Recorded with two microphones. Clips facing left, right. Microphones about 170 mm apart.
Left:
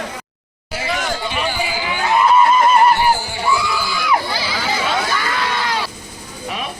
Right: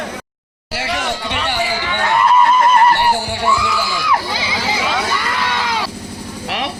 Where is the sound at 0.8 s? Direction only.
75° right (ahead or behind).